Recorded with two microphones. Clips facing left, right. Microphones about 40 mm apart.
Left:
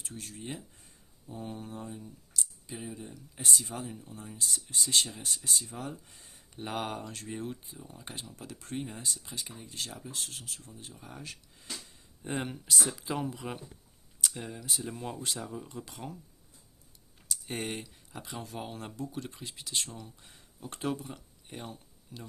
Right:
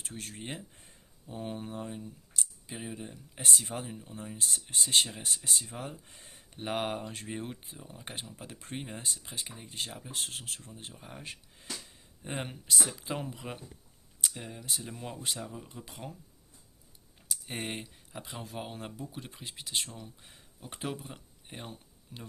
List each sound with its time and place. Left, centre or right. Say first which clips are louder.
0.0 s speech: right 1 dB; right
3.8 s speech: right 1 dB; right
6.5 s speech: right 2 dB; right
10.9 s speech: left 2 dB; right
12.2 s speech: left 3 dB; centre
17.2 s speech: left 1 dB; centre
21.4 s a sound: left 1 dB; centre